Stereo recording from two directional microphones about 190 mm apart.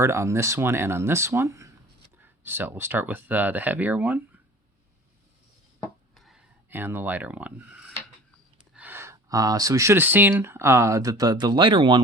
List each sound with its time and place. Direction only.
0.0 s speech: 15° right (ahead or behind)
6.1 s a sound: centre (ahead or behind)
8.7 s speech: 10° right (ahead or behind); by 11.9 s 25° right (ahead or behind)